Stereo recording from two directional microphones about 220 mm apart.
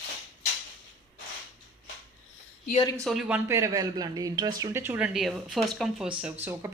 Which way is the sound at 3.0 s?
5° right (ahead or behind).